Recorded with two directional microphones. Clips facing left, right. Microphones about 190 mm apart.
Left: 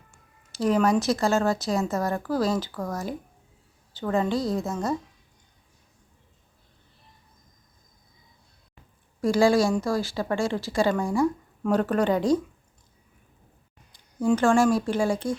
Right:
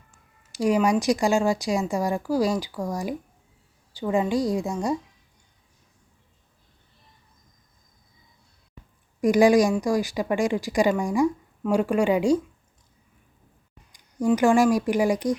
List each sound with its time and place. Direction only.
0.5 s speech: 10° right (ahead or behind)
9.2 s speech: 15° right (ahead or behind)
13.9 s speech: 15° right (ahead or behind)